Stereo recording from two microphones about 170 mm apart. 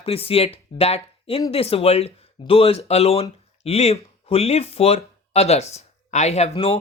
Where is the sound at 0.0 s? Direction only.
35° left (ahead or behind).